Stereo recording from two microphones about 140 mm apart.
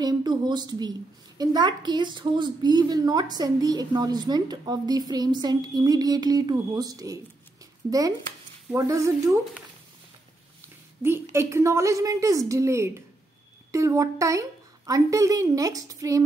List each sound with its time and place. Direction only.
0.0 s a woman's voice: 30° right (ahead or behind)
8.7 s a woman's voice: 20° right (ahead or behind)
11.0 s a woman's voice: 20° right (ahead or behind)